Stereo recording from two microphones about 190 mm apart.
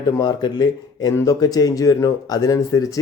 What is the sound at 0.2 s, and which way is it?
Speech, 20° left (ahead or behind).